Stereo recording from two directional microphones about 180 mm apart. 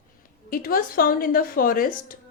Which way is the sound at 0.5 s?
55° left (ahead or behind).